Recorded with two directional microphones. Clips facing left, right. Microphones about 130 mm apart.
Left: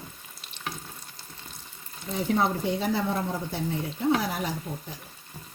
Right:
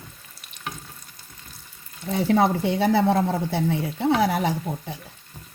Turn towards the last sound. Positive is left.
turn(degrees=-70)  # may be behind; listen again after turning